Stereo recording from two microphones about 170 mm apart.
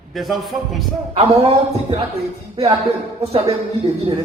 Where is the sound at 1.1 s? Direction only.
35° right (ahead or behind).